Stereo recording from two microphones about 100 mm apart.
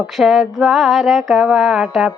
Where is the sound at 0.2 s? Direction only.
Centre (ahead or behind).